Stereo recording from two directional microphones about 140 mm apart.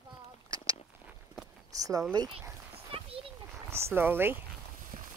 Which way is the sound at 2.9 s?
40° right (ahead or behind).